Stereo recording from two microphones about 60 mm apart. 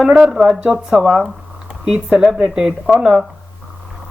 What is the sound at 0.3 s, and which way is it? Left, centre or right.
A woman's voice, centre.